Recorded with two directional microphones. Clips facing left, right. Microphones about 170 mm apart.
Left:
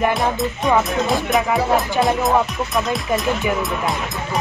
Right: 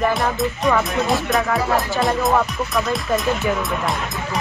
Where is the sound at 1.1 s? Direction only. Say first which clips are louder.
Even; centre (ahead or behind).